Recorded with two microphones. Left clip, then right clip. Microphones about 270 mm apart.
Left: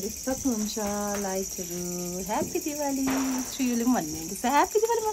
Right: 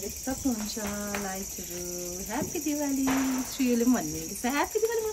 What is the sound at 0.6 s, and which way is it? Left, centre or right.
Child singing, centre.